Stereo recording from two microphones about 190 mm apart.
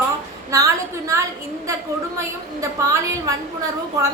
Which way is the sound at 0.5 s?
15° right (ahead or behind).